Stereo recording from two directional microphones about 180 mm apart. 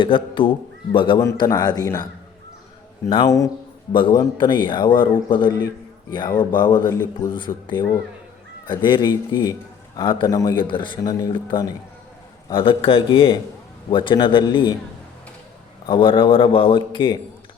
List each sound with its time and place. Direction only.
0.0 s a man's voice: 25° left (ahead or behind)
3.2 s a man's voice: 15° left (ahead or behind)
15.9 s a man's voice: 30° left (ahead or behind)